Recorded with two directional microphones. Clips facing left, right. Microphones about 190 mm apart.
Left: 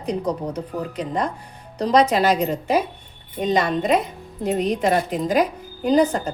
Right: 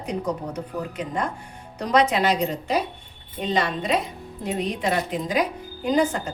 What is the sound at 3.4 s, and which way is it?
A woman's voice, 45° left (ahead or behind).